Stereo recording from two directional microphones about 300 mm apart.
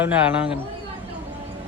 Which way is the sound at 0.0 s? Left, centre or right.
Centre.